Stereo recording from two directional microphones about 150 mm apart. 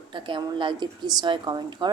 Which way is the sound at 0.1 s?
35° right (ahead or behind).